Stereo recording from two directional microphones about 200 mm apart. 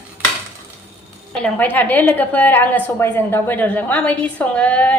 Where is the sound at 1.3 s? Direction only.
5° left (ahead or behind).